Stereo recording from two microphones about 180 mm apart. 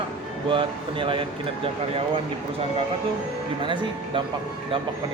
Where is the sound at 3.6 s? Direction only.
25° right (ahead or behind).